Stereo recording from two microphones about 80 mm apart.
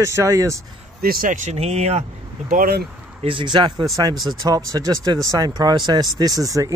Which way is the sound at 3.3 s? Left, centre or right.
Right.